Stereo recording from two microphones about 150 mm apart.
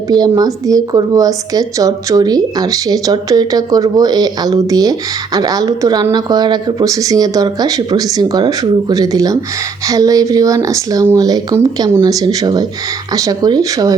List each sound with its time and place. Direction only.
0.1 s a woman's voice: 25° right (ahead or behind)